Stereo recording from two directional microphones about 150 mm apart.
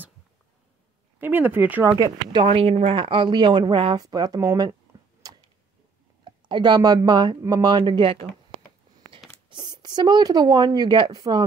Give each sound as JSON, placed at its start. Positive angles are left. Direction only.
{"t": 1.2, "sound": "speech", "side_deg": -15}
{"t": 2.3, "sound": "speech", "side_deg": -40}
{"t": 5.2, "sound": "tick-tock", "side_deg": -25}
{"t": 6.2, "sound": "speech", "side_deg": -30}
{"t": 9.5, "sound": "speech", "side_deg": -30}